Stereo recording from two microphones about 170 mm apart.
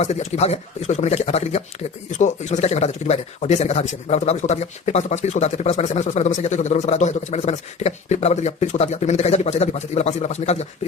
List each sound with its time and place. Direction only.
0.0 s speech: 40° left (ahead or behind)